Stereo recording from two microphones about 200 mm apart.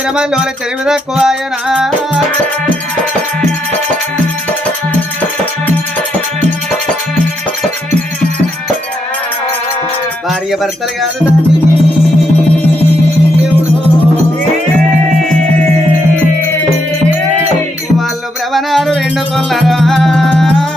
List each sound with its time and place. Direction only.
0.9 s music: centre (ahead or behind)
10.2 s speech: centre (ahead or behind)
18.5 s music: centre (ahead or behind)